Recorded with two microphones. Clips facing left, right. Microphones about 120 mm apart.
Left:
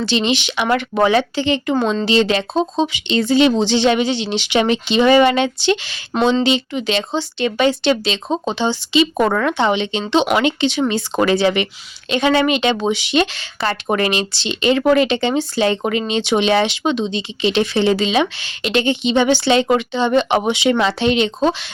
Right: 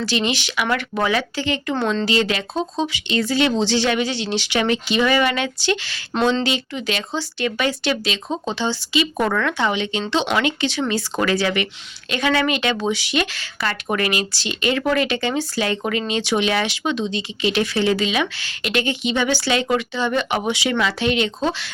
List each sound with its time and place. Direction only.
0.0 s speech: 25° left (ahead or behind)